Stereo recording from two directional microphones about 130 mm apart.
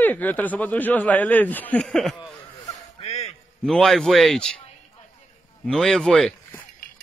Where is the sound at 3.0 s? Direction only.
55° left (ahead or behind).